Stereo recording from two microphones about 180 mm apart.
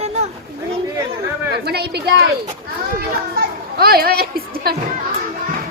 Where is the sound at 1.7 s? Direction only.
65° right (ahead or behind).